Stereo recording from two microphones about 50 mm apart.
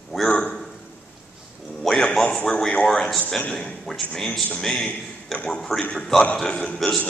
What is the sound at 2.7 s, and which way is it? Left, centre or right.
A man's voice, centre.